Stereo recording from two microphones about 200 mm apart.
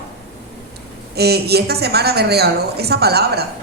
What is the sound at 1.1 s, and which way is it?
A woman's voice, 55° right (ahead or behind).